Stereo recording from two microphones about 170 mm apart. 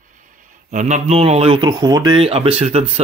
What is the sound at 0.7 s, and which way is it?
Speech, 45° right (ahead or behind).